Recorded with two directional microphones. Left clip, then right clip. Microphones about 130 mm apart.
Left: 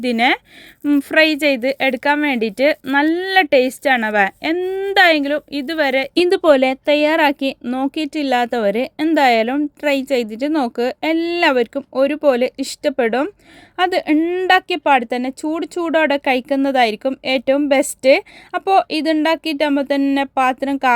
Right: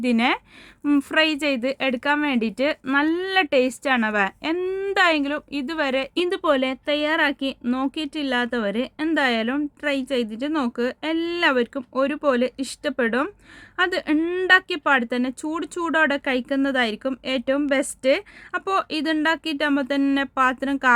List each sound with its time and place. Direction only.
0.0 s speech: 25° left (ahead or behind)
4.6 s a woman's voice: 15° left (ahead or behind)
4.9 s a woman's voice: 25° left (ahead or behind)